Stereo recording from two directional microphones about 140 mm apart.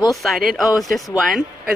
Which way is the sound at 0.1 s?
Centre (ahead or behind).